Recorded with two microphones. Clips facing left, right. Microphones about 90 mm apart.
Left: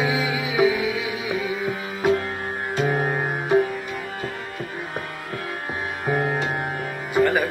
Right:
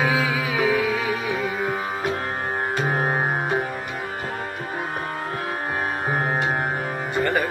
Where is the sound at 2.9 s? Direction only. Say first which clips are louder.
Left 1 dB; 40° right (ahead or behind).